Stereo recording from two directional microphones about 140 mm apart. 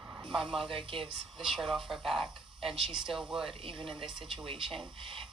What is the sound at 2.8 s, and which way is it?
Speech, 35° right (ahead or behind).